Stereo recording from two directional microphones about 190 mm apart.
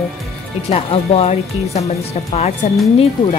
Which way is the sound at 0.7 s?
35° left (ahead or behind).